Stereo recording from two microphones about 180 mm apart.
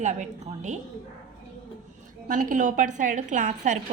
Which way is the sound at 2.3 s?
45° right (ahead or behind).